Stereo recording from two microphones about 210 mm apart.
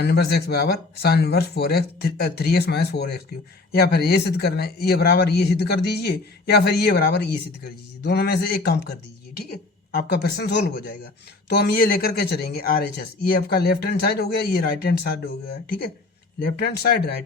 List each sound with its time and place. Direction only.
0.0 s speech: 50° left (ahead or behind)
9.9 s speech: 45° left (ahead or behind)
16.6 s speech: 50° left (ahead or behind)